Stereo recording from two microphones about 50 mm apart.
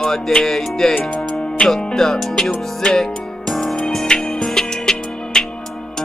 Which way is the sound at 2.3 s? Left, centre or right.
Left.